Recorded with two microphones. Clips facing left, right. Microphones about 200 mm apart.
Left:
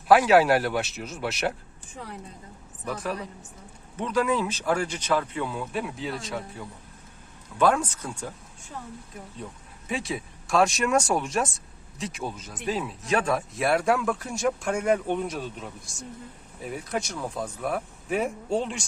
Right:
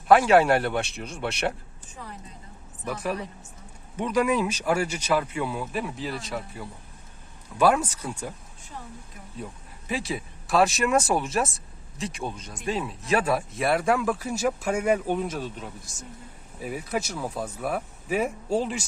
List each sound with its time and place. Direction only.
0.1 s speech: centre (ahead or behind)
2.8 s speech: 10° right (ahead or behind)
9.9 s speech: centre (ahead or behind)